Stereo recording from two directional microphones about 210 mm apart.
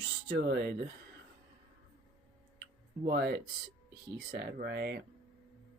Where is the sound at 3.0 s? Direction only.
50° right (ahead or behind).